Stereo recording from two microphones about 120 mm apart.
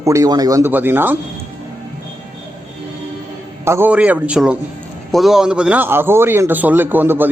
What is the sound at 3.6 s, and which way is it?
A man's voice, 20° right (ahead or behind).